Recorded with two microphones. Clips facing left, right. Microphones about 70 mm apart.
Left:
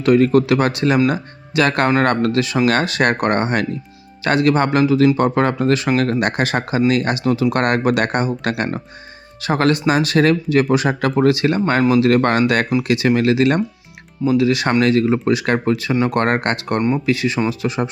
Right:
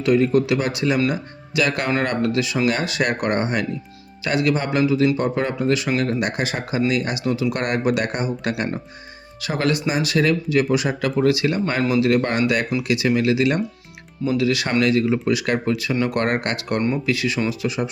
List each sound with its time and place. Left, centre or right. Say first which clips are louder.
0.0 s speech: left 4 dB; left
9.4 s speech: left 5 dB; left
12.0 s speech: left 4 dB; left
14.3 s speech: left 5 dB; left
14.8 s speech: left 2 dB; left